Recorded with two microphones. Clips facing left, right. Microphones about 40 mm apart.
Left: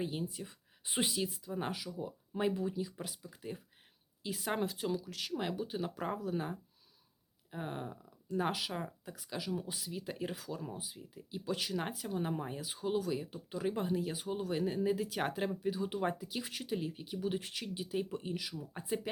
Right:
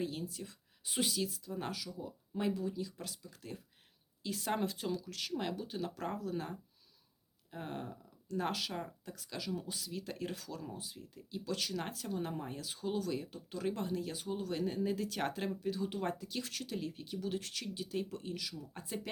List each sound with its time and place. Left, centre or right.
0.0 s speech: centre